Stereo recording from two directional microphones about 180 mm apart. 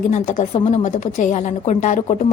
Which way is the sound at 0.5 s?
35° left (ahead or behind).